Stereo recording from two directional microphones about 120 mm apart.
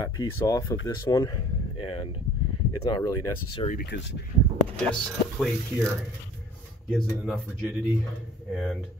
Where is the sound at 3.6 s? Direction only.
45° left (ahead or behind).